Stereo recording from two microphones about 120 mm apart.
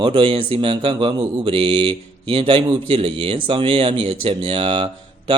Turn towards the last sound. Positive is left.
turn(degrees=-50)  # may be behind; listen again after turning